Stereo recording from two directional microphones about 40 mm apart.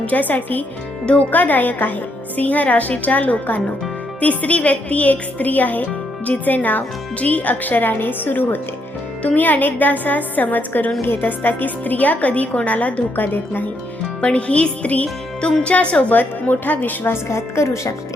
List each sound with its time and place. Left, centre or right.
0.0 s a woman's voice: left
4.2 s a woman's voice: left
13.1 s a woman's voice: left
14.2 s speech: left
16.1 s a woman's voice: left